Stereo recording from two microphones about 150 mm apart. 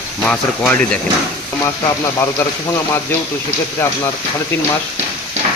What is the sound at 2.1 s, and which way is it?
Speech, 15° left (ahead or behind).